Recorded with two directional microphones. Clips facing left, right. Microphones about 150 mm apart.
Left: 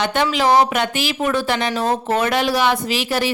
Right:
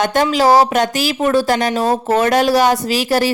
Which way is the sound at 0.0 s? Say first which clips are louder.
Right 4 dB; 45° right (ahead or behind).